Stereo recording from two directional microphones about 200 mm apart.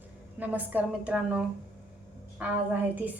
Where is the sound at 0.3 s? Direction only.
10° right (ahead or behind).